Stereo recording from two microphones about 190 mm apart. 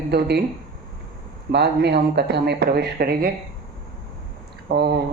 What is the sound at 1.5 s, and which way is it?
Speech, 60° right (ahead or behind).